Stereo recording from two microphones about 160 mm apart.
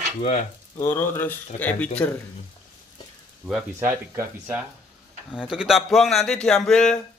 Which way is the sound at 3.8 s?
15° right (ahead or behind).